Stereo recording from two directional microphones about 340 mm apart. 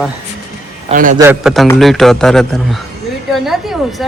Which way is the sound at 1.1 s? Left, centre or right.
Centre.